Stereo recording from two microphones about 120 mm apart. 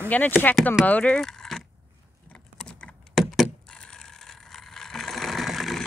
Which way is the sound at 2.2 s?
5° left (ahead or behind).